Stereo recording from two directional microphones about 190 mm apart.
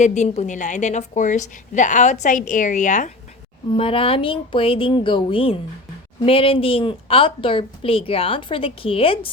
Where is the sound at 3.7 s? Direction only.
30° left (ahead or behind).